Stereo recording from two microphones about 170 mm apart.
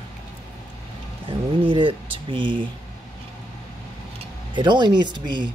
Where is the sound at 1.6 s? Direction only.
30° right (ahead or behind).